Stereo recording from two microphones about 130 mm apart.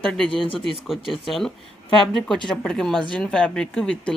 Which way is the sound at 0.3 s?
40° left (ahead or behind).